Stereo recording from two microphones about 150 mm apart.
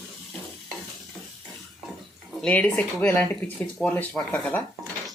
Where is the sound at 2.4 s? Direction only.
10° left (ahead or behind).